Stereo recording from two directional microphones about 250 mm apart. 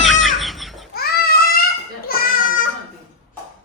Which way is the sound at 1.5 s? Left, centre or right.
Left.